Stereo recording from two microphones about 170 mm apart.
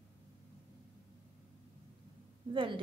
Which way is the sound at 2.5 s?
30° right (ahead or behind).